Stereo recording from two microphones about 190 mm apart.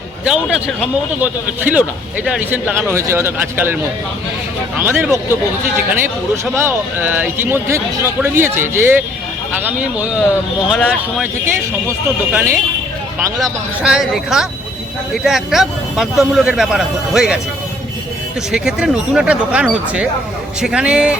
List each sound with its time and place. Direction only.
0.3 s a man's voice: centre (ahead or behind)
4.8 s speech: 10° right (ahead or behind)
10.7 s a man's voice: 5° right (ahead or behind)
13.4 s a man's voice: centre (ahead or behind)
18.5 s a man's voice: 5° right (ahead or behind)